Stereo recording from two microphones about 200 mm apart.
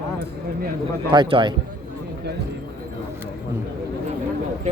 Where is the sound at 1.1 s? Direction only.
25° right (ahead or behind).